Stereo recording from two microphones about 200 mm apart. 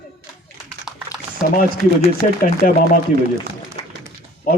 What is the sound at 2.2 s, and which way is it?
Speech, 40° left (ahead or behind).